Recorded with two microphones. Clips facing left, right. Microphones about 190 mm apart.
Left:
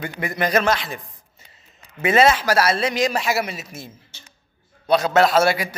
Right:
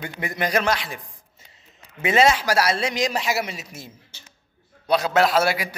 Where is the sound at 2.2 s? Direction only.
15° right (ahead or behind).